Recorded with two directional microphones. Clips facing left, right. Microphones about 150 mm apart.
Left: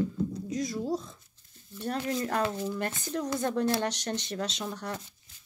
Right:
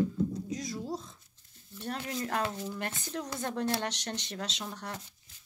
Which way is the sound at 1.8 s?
40° left (ahead or behind).